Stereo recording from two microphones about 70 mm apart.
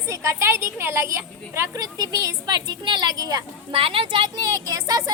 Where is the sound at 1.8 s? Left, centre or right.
Right.